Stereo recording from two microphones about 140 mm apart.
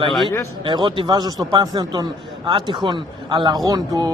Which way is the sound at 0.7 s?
35° right (ahead or behind).